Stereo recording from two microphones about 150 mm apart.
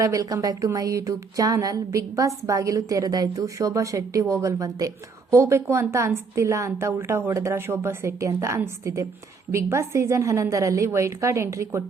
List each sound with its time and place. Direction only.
0.0 s a woman's voice: 20° right (ahead or behind)